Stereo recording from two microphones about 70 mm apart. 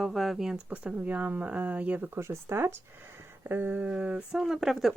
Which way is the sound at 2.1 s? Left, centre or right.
Right.